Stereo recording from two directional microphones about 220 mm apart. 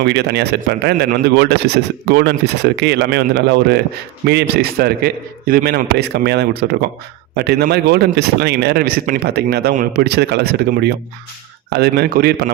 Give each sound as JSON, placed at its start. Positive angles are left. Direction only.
{"t": 0.0, "sound": "speech", "side_deg": -50}